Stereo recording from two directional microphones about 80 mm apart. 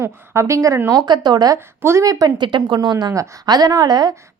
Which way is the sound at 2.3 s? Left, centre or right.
Right.